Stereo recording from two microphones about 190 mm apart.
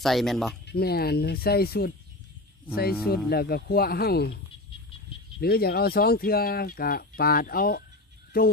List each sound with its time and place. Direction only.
0.0 s speech: centre (ahead or behind)
0.7 s speech: 55° left (ahead or behind)
5.4 s speech: 55° left (ahead or behind)